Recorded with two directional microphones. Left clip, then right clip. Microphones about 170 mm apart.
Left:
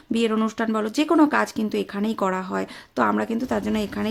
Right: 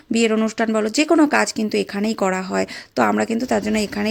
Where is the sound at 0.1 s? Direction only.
15° right (ahead or behind).